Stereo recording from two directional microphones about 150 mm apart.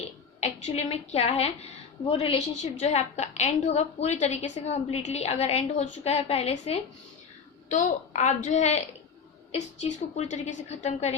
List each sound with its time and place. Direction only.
0.3 s a woman's voice: 45° left (ahead or behind)
7.7 s a woman's voice: 55° left (ahead or behind)